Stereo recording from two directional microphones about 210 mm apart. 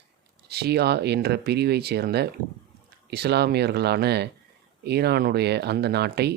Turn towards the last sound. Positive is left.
turn(degrees=-50)  # may be behind; listen again after turning